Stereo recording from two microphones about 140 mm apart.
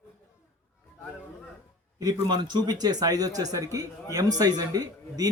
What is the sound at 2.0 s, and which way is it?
Speech, 30° right (ahead or behind).